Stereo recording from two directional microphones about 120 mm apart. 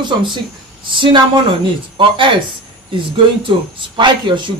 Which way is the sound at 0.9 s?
45° right (ahead or behind).